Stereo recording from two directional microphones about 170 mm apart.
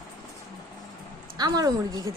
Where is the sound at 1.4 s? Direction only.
25° right (ahead or behind).